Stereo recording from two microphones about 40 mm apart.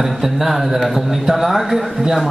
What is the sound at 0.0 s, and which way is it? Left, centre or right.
A man's voice, centre.